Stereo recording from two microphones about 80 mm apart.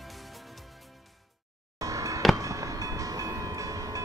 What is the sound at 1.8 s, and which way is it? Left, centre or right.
Music, right.